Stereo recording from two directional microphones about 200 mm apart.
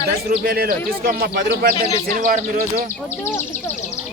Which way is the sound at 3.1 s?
10° left (ahead or behind).